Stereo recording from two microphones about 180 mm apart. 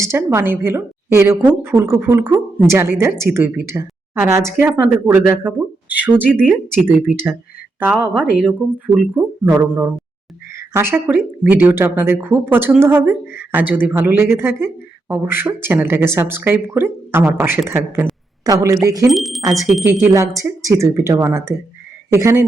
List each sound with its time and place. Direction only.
0.0 s speech: 15° right (ahead or behind)
19.1 s speech: centre (ahead or behind)
19.8 s speech: 15° right (ahead or behind)